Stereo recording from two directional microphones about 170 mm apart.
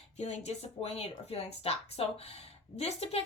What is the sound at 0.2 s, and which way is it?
A woman's voice, 40° left (ahead or behind).